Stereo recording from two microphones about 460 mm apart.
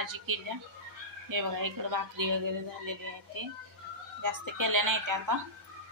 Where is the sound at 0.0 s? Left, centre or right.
Right.